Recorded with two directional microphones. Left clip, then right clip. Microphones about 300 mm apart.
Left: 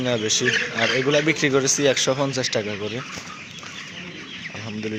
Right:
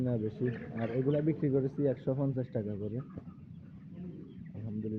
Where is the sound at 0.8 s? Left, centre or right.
Left.